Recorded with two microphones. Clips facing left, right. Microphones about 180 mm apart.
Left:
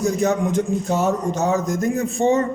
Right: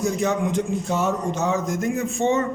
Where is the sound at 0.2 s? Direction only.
40° left (ahead or behind).